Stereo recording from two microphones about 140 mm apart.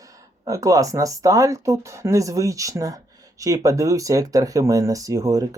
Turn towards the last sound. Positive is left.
turn(degrees=-25)  # may be behind; listen again after turning